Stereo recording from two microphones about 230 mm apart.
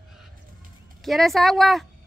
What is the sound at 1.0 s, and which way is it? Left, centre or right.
Speech, centre.